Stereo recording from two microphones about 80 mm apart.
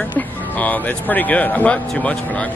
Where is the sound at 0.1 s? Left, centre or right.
Left.